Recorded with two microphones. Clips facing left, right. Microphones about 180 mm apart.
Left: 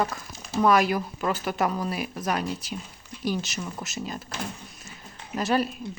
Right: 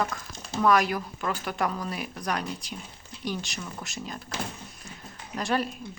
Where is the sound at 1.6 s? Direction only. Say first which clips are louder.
Left 3 dB; 20° left (ahead or behind).